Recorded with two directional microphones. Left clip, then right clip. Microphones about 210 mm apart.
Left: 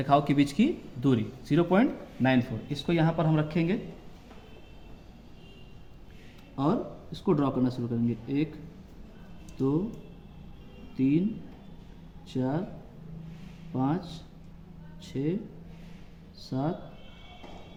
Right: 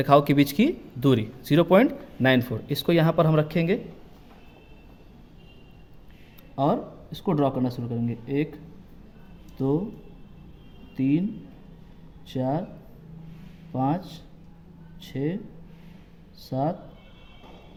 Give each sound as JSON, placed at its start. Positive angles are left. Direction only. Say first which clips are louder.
{"t": 0.0, "sound": "speech", "louder": "right 5 dB", "side_deg": -50}
{"t": 6.6, "sound": "speech", "louder": "right 5 dB", "side_deg": -45}
{"t": 10.9, "sound": "speech", "louder": "right 2 dB", "side_deg": -45}
{"t": 12.3, "sound": "speech", "louder": "right 4 dB", "side_deg": -45}
{"t": 13.7, "sound": "speech", "louder": "right 4 dB", "side_deg": -45}
{"t": 16.4, "sound": "speech", "louder": "right 5 dB", "side_deg": -45}